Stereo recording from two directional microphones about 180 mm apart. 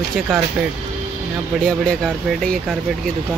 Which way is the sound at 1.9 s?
5° left (ahead or behind).